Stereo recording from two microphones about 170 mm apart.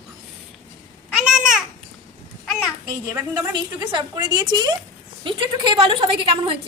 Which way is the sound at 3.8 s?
25° right (ahead or behind).